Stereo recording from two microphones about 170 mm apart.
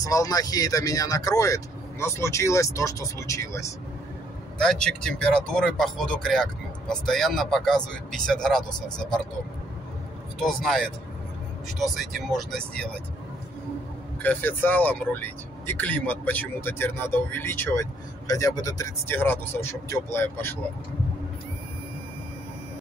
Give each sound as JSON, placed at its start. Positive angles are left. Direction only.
{"t": 0.0, "sound": "speech", "side_deg": 20}
{"t": 4.6, "sound": "speech", "side_deg": 5}
{"t": 10.4, "sound": "speech", "side_deg": 0}
{"t": 14.2, "sound": "speech", "side_deg": 10}